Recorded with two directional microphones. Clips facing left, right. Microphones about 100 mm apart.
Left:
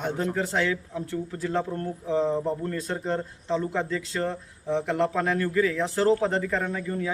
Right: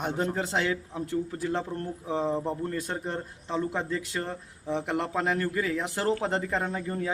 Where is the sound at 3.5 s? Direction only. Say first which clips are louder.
Left 2 dB; 10° right (ahead or behind).